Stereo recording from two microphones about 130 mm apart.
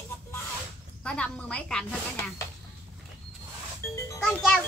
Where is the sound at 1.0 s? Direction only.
10° left (ahead or behind).